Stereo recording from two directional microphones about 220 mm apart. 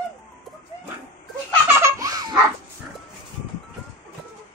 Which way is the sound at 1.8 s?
15° right (ahead or behind).